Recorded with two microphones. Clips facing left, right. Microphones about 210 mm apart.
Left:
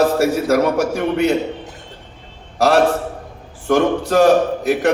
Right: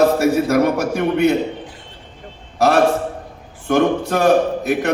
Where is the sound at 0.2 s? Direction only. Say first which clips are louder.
Even; 55° right (ahead or behind).